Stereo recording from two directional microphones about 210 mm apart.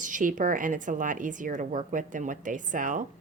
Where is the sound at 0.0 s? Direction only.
40° right (ahead or behind).